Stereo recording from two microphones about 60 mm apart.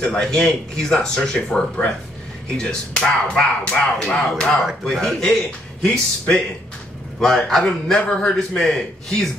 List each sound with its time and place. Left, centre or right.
0.0 s speech: centre